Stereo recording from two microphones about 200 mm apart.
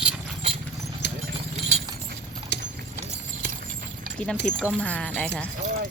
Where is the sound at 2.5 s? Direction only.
55° left (ahead or behind).